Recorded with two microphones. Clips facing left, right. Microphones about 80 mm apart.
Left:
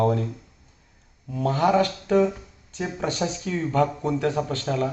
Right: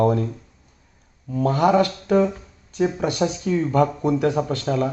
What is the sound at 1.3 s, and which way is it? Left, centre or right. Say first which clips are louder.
Speech: right 3 dB; right.